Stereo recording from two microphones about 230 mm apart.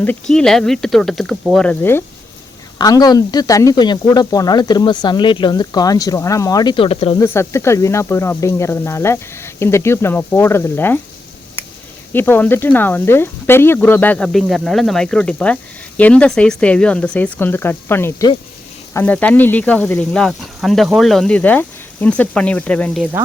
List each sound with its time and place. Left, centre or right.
0.0 s speech: centre; by 7.3 s left
7.3 s speech: centre
12.1 s speech: centre